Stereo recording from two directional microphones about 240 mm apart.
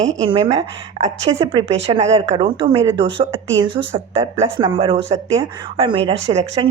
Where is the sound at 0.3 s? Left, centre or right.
Right.